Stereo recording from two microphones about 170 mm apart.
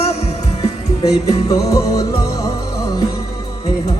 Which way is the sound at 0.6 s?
20° left (ahead or behind).